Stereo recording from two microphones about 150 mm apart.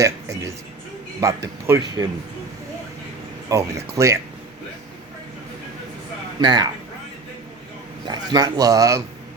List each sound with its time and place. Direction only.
0.0 s a man's voice: 20° right (ahead or behind)
3.5 s a man's voice: 20° right (ahead or behind)
6.4 s a man's voice: 30° right (ahead or behind)
8.0 s a man's voice: 30° right (ahead or behind)